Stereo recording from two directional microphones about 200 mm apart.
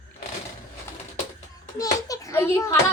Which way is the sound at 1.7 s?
15° left (ahead or behind).